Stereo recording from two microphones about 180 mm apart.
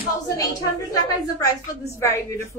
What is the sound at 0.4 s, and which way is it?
A woman's voice, 20° left (ahead or behind).